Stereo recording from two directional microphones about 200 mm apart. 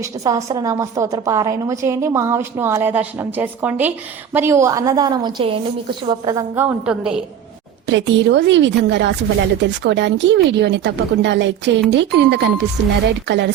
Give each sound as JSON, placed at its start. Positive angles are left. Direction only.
{"t": 0.0, "sound": "a woman's voice", "side_deg": -15}
{"t": 7.9, "sound": "speech", "side_deg": -65}